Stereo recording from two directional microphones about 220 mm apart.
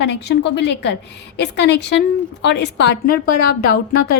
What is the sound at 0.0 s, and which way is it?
Speech, 50° left (ahead or behind).